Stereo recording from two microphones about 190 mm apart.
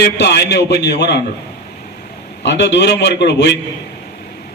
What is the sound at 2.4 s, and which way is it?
A man's voice, 65° left (ahead or behind).